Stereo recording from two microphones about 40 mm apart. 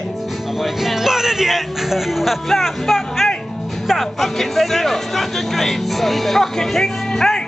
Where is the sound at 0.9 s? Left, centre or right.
Centre.